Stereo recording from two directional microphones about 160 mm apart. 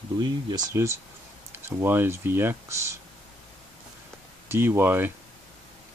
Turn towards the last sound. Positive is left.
turn(degrees=-15)  # may be behind; listen again after turning